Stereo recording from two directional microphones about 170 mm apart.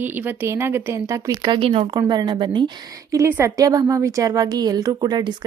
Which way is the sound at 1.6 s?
30° right (ahead or behind).